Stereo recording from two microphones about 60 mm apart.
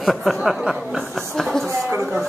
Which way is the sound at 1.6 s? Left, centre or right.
Right.